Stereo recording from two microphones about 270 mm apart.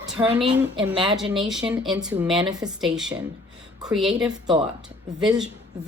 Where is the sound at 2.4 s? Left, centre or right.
Centre.